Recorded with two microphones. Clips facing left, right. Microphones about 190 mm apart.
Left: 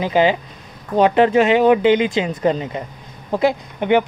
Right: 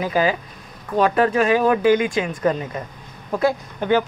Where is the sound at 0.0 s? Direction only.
25° left (ahead or behind).